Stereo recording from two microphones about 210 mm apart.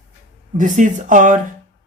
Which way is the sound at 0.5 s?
40° right (ahead or behind).